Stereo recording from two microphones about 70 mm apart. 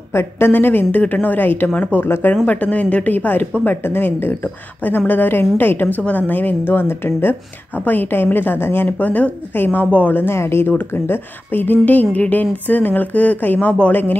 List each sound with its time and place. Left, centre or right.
0.1 s speech: left
2.0 s speech: left
2.4 s speech: left
8.8 s speech: left